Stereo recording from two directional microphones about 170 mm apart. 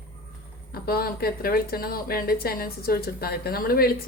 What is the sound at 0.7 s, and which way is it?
A woman's voice, 65° left (ahead or behind).